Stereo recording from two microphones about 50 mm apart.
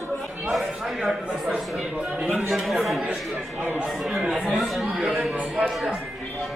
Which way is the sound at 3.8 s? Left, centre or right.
Centre.